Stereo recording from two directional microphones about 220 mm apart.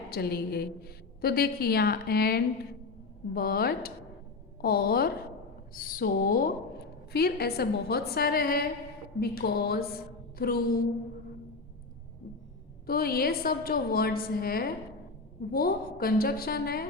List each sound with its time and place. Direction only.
0.1 s a woman's voice: 45° left (ahead or behind)
12.8 s a woman's voice: 45° left (ahead or behind)